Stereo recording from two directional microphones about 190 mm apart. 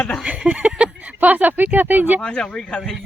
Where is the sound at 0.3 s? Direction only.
5° right (ahead or behind).